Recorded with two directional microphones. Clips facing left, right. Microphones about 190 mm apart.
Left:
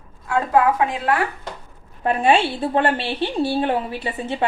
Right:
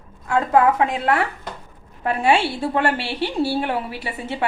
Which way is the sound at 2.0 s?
20° left (ahead or behind).